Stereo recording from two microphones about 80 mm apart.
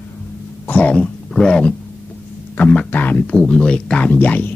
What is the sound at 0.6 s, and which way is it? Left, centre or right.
Speech, centre.